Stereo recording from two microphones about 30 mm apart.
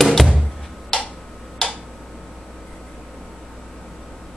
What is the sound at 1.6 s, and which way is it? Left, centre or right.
Tick-tock, left.